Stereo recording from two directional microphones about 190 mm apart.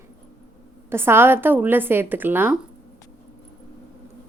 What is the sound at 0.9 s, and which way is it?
A woman's voice, 10° right (ahead or behind).